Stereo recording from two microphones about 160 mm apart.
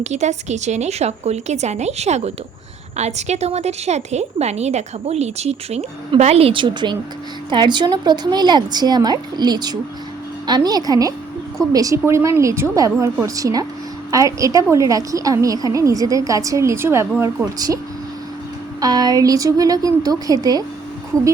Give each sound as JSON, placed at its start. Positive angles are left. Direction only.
{"t": 0.0, "sound": "a woman's voice", "side_deg": -45}
{"t": 18.8, "sound": "a woman's voice", "side_deg": -25}